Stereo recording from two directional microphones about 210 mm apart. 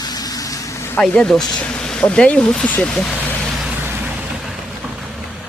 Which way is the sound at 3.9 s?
5° right (ahead or behind).